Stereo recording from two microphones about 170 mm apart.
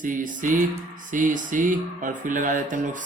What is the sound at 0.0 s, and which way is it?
Speech, 50° right (ahead or behind).